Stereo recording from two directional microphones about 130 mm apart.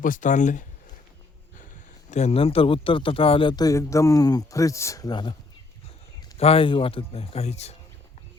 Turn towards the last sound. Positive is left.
turn(degrees=55)  # may be behind; listen again after turning